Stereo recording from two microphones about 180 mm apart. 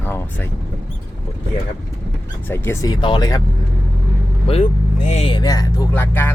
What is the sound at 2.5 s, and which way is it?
Speech, 15° left (ahead or behind).